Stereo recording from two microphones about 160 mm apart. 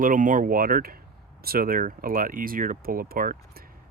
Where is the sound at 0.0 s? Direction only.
55° right (ahead or behind).